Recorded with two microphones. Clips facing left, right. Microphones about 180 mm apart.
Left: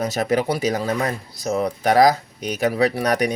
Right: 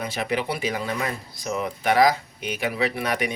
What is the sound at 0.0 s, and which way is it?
Speech, 40° left (ahead or behind).